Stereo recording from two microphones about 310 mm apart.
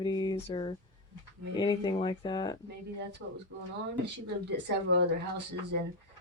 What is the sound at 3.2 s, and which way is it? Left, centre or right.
Speech, right.